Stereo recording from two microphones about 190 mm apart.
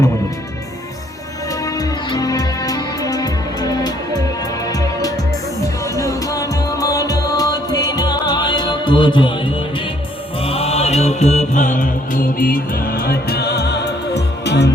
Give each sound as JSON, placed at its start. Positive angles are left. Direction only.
{"t": 1.6, "sound": "music", "side_deg": 20}